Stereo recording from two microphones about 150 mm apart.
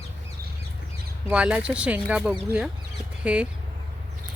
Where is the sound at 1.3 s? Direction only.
10° right (ahead or behind).